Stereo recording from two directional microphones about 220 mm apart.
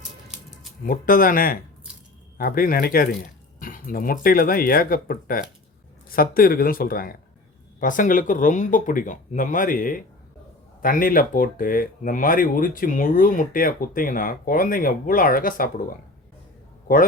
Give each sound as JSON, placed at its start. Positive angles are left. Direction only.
{"t": 0.9, "sound": "speech", "side_deg": 40}